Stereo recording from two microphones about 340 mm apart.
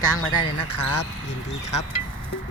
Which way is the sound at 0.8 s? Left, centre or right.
Left.